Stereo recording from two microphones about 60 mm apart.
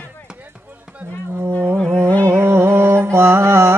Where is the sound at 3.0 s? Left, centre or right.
Right.